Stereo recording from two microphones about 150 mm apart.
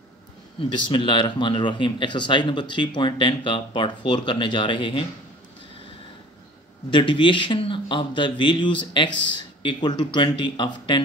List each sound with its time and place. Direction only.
0.6 s speech: 30° left (ahead or behind)
6.9 s speech: 35° left (ahead or behind)